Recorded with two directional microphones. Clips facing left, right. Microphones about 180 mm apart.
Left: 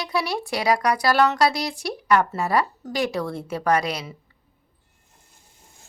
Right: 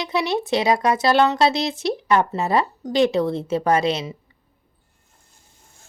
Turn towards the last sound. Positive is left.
turn(degrees=-20)  # may be behind; listen again after turning